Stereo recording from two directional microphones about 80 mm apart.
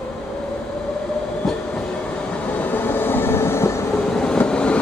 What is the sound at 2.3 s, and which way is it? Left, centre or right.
Train, centre.